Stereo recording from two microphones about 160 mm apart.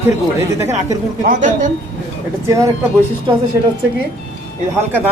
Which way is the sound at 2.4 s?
20° right (ahead or behind).